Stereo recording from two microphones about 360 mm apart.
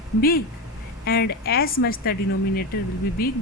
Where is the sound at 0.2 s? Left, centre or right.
Left.